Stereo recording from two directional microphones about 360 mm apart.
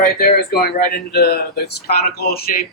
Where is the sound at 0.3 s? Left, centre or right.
Left.